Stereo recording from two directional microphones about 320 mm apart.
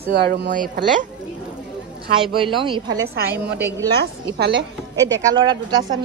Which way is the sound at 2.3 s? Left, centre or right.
Centre.